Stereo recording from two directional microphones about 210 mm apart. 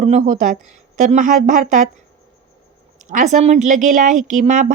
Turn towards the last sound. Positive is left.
turn(degrees=-35)  # may be behind; listen again after turning